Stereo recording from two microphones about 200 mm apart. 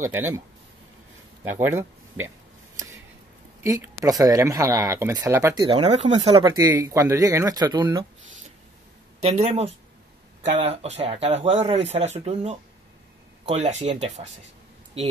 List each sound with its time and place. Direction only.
0.0 s speech: 10° right (ahead or behind)
1.5 s speech: 10° right (ahead or behind)
3.6 s speech: 15° right (ahead or behind); by 6.4 s 30° right (ahead or behind)
6.4 s speech: 15° right (ahead or behind)
9.2 s speech: 35° right (ahead or behind)